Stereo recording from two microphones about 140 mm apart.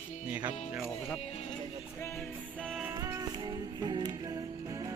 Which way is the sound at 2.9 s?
25° right (ahead or behind).